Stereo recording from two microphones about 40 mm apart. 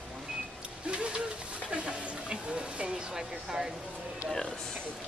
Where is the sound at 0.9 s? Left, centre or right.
Right.